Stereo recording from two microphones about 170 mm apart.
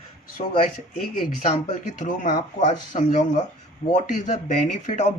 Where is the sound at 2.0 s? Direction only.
45° left (ahead or behind).